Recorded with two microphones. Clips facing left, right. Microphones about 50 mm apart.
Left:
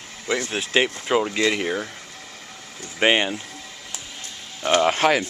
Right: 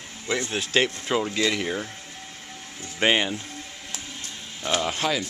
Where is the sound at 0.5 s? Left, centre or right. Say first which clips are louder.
Left 1 dB; centre.